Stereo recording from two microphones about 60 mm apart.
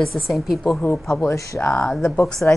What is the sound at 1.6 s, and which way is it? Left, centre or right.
Speech, left.